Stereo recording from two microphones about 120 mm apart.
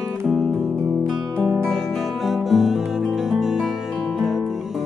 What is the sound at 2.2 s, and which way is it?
Music, centre (ahead or behind).